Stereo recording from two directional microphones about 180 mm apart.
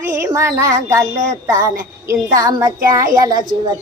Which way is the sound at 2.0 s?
20° right (ahead or behind).